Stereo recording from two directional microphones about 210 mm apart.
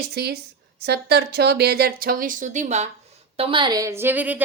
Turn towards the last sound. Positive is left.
turn(degrees=-10)  # may be behind; listen again after turning